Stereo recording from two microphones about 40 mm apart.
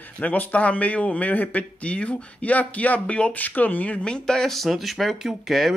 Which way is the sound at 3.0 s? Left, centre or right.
Left.